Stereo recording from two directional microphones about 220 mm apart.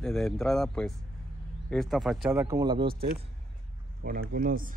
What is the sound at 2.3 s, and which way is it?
Speech, 15° right (ahead or behind).